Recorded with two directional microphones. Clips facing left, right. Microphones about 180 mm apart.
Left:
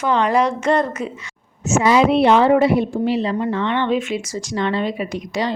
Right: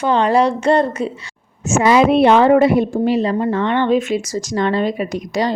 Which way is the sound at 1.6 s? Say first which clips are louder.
Right 2 dB; 55° right (ahead or behind).